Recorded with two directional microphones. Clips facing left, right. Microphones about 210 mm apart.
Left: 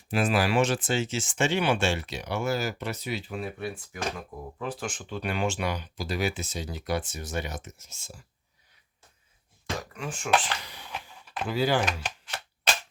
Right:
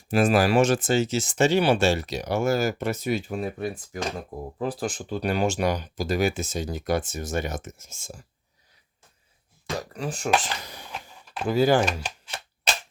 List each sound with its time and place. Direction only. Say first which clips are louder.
0.1 s speech: right 5 dB; 45° right (ahead or behind)
9.9 s speech: right 2 dB; 35° right (ahead or behind)